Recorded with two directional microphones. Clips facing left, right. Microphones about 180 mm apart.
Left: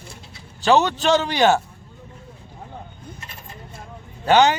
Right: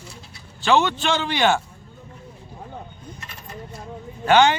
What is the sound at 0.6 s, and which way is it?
A man's voice, 40° left (ahead or behind).